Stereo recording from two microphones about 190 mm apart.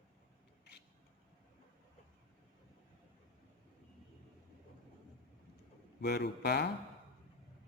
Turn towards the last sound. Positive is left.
turn(degrees=60)  # may be behind; listen again after turning